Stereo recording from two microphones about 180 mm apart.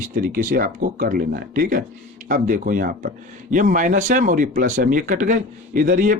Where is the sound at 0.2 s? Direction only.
50° right (ahead or behind).